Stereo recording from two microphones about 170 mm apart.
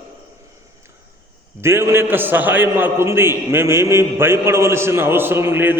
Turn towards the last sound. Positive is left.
turn(degrees=-10)  # may be behind; listen again after turning